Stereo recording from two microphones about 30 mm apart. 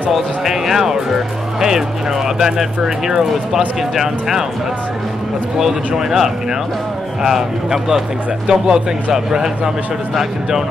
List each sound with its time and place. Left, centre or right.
0.1 s speech: centre
5.9 s speech: centre
8.5 s speech: right